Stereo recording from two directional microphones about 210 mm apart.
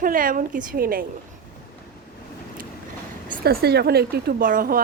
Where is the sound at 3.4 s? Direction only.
45° right (ahead or behind).